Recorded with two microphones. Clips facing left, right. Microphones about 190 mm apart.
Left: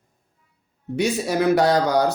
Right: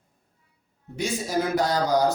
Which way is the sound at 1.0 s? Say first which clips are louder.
Left 5 dB; 70° left (ahead or behind).